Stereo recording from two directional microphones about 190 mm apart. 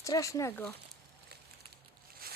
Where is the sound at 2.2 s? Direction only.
55° right (ahead or behind).